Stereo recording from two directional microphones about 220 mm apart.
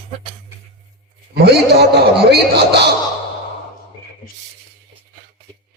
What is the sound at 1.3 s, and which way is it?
A man's voice, 45° right (ahead or behind).